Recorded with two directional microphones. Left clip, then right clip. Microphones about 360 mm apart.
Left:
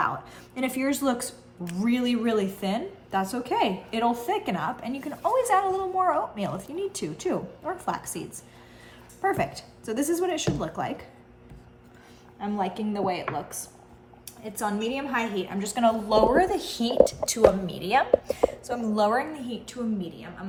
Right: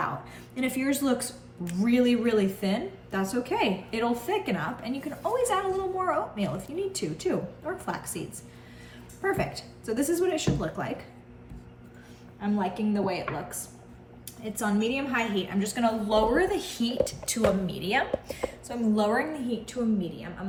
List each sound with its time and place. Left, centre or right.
0.0 s a sound: centre
1.7 s a woman's voice: centre
9.2 s a woman's voice: left
12.4 s a woman's voice: left
14.4 s a woman's voice: centre